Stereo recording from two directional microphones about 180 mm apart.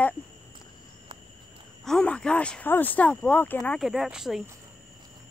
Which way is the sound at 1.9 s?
5° left (ahead or behind).